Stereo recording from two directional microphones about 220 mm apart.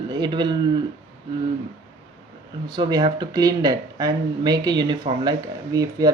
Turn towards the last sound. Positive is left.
turn(degrees=-15)  # may be behind; listen again after turning